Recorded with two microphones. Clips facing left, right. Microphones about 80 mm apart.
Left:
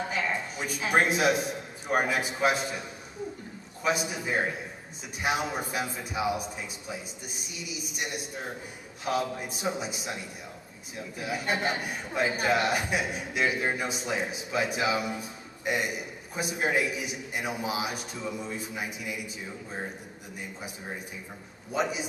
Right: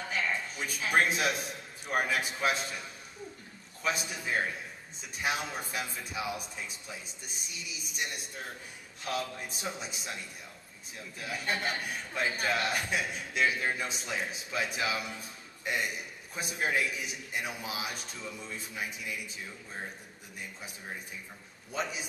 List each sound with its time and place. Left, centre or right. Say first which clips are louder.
0.0 s a sound: left 3 dB; centre
0.9 s a man's voice: left 4 dB; centre
3.8 s a man's voice: left 5 dB; centre
8.0 s a man's voice: left 3 dB; centre
21.7 s a man's voice: left 6 dB; centre